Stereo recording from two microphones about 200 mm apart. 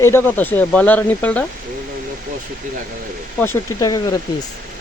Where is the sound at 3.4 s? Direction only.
15° left (ahead or behind).